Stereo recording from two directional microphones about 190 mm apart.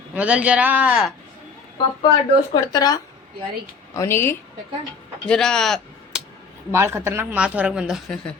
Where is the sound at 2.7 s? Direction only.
20° left (ahead or behind); by 6.2 s centre (ahead or behind).